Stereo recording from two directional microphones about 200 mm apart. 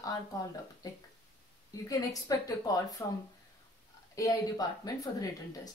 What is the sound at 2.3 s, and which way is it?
A woman's voice, 20° left (ahead or behind).